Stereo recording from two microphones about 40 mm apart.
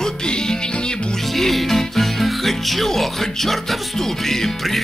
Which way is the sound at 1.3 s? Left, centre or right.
Centre.